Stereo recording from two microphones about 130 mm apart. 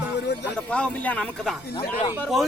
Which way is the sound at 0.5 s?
10° left (ahead or behind).